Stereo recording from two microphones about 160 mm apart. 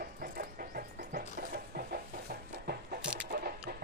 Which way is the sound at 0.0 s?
65° right (ahead or behind).